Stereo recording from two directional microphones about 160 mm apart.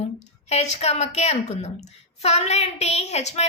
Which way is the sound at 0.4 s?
45° left (ahead or behind).